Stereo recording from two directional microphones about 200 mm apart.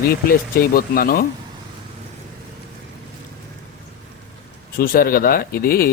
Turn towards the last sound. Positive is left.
turn(degrees=45)  # may be behind; listen again after turning